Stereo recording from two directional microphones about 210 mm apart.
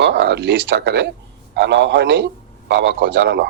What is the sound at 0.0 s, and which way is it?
A man's voice, 55° right (ahead or behind).